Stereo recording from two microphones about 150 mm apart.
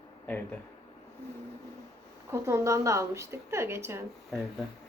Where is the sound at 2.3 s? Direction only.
20° right (ahead or behind).